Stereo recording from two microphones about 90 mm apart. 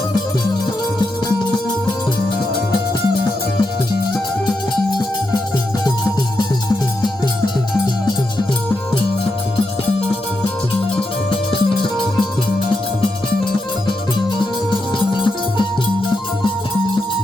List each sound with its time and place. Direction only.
5.8 s music: 45° left (ahead or behind)
11.3 s music: 70° left (ahead or behind)
14.7 s music: centre (ahead or behind)